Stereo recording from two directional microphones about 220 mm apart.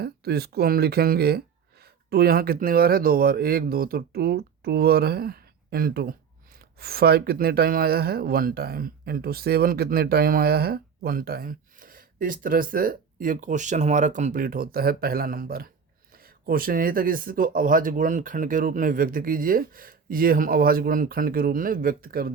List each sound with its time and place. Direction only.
0.0 s speech: 45° right (ahead or behind)